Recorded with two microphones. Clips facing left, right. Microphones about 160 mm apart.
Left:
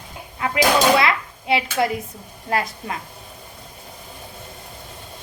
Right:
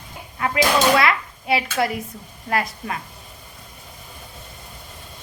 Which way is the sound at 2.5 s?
25° left (ahead or behind).